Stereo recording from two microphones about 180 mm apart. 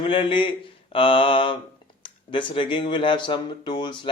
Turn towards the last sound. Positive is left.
turn(degrees=25)  # may be behind; listen again after turning